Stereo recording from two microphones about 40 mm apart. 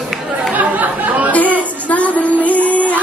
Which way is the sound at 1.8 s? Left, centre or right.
Left.